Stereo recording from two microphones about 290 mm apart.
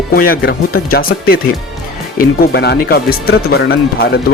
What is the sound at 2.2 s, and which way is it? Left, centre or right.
Speech, left.